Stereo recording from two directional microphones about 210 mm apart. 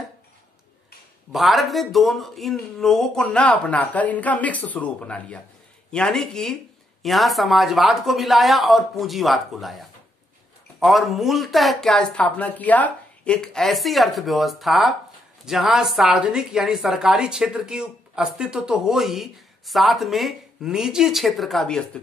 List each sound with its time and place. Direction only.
1.3 s a woman's voice: centre (ahead or behind)